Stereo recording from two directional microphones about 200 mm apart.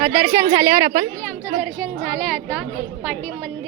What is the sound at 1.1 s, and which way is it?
A woman's voice, 10° left (ahead or behind).